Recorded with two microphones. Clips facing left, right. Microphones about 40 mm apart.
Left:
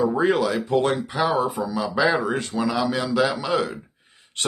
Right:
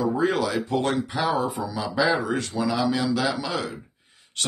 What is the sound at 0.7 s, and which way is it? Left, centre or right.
Speech, centre.